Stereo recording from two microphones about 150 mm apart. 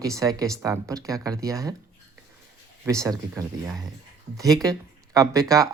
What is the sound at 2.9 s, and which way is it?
Speech, 20° right (ahead or behind).